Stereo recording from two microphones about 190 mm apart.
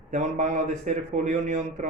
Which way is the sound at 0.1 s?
40° right (ahead or behind).